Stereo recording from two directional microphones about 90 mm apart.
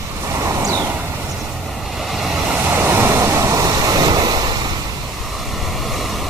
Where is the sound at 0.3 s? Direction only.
35° right (ahead or behind).